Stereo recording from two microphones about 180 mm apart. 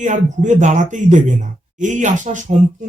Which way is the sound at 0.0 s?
45° right (ahead or behind).